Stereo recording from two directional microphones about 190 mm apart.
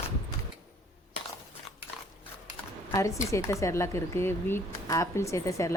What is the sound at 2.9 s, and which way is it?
Speech, 15° left (ahead or behind).